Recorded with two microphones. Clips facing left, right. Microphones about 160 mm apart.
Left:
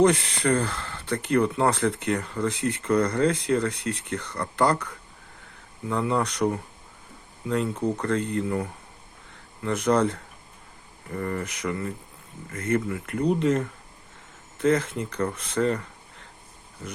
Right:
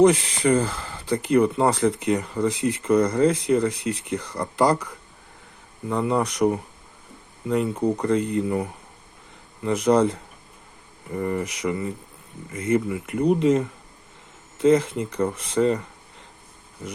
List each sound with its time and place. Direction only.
0.0 s speech: 10° right (ahead or behind)